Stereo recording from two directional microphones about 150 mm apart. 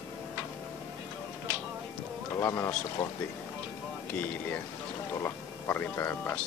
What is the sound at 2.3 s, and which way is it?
Speech, 20° left (ahead or behind).